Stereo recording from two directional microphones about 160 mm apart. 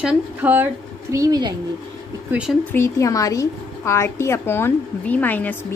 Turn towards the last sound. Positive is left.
turn(degrees=10)  # may be behind; listen again after turning